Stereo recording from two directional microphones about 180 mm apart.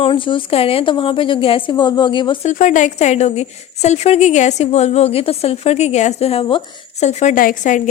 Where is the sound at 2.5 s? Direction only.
45° left (ahead or behind).